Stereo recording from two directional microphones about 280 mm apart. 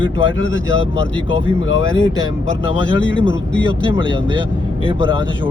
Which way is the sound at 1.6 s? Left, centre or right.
Left.